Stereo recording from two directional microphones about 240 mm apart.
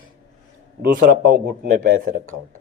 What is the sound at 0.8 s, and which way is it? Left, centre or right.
A man's voice, right.